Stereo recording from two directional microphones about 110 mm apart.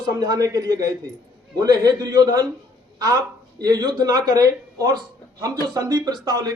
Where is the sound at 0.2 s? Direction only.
35° right (ahead or behind).